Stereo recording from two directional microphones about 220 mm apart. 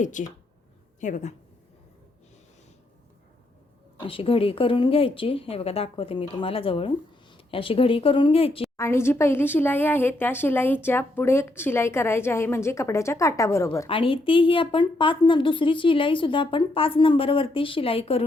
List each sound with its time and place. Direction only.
0.0 s speech: 35° left (ahead or behind)
4.0 s a woman's voice: 25° left (ahead or behind)
8.7 s speech: 10° left (ahead or behind)
13.8 s a woman's voice: 25° left (ahead or behind)